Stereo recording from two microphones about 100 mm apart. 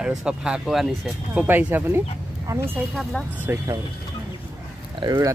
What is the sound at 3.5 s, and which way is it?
Speech, 25° right (ahead or behind).